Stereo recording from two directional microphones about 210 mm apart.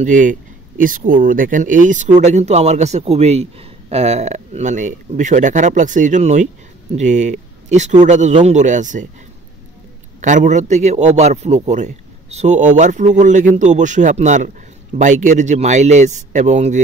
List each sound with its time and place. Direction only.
0.0 s speech: 35° right (ahead or behind)
10.2 s speech: 35° right (ahead or behind)